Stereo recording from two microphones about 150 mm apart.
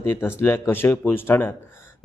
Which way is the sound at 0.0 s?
15° left (ahead or behind).